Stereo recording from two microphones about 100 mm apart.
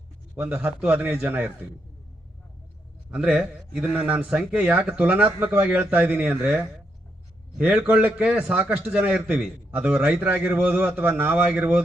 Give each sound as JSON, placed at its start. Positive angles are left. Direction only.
{"t": 0.4, "sound": "a man's voice", "side_deg": -15}
{"t": 3.1, "sound": "speech", "side_deg": -10}
{"t": 9.4, "sound": "a man's voice", "side_deg": -5}
{"t": 10.0, "sound": "speech", "side_deg": -15}